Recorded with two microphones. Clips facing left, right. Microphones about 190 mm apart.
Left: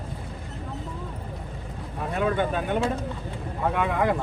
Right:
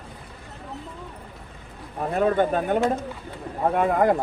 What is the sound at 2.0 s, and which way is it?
Speech, 40° right (ahead or behind).